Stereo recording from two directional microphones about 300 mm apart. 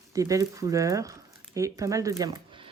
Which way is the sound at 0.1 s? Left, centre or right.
Centre.